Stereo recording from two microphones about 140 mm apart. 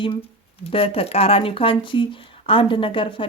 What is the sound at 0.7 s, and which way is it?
Speech, 45° left (ahead or behind).